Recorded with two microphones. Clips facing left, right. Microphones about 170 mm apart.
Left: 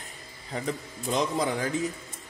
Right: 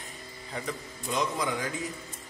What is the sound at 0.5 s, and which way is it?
Speech, 40° left (ahead or behind).